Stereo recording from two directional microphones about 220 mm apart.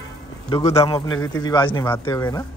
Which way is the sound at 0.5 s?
15° left (ahead or behind).